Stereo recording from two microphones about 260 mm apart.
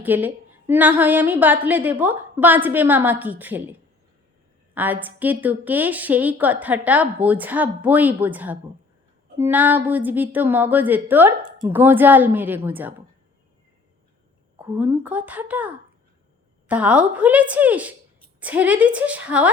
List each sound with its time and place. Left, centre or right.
0.0 s a woman's voice: centre
14.6 s a woman's voice: centre